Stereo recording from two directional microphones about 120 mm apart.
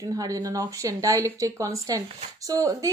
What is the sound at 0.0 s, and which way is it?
A woman's voice, 30° right (ahead or behind).